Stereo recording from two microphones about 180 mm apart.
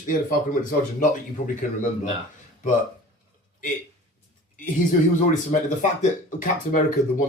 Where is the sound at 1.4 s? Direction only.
45° left (ahead or behind).